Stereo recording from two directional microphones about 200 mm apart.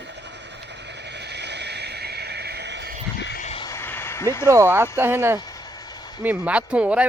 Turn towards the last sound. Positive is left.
turn(degrees=-5)  # may be behind; listen again after turning